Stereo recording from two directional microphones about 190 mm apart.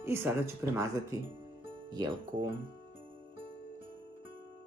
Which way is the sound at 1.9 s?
20° right (ahead or behind).